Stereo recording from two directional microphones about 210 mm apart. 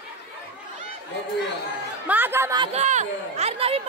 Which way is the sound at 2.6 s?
30° right (ahead or behind).